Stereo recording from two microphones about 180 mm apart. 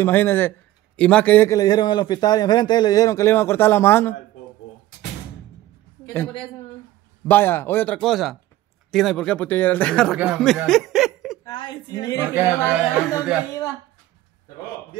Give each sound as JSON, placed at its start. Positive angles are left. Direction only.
{"t": 0.0, "sound": "a man's voice", "side_deg": 10}
{"t": 6.0, "sound": "a man's voice", "side_deg": 10}
{"t": 11.4, "sound": "speech", "side_deg": 25}
{"t": 12.4, "sound": "speech", "side_deg": -10}
{"t": 13.5, "sound": "a man's voice", "side_deg": 15}